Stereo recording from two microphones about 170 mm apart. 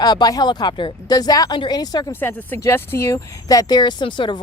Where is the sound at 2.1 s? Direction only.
10° left (ahead or behind); by 4.4 s 30° left (ahead or behind).